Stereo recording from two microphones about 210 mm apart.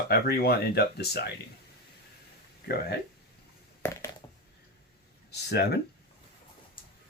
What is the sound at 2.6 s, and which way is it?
Speech, 50° left (ahead or behind).